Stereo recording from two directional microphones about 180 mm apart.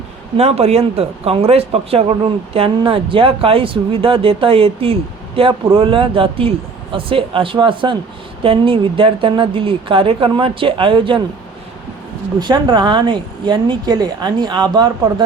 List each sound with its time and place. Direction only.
0.3 s a woman's voice: 35° right (ahead or behind)
12.4 s a woman's voice: 25° right (ahead or behind)